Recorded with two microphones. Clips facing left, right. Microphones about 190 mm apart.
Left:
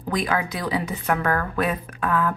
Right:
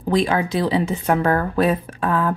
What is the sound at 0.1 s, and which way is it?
Speech, 30° right (ahead or behind).